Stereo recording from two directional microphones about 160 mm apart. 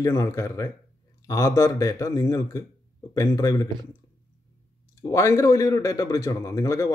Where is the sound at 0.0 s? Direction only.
20° left (ahead or behind).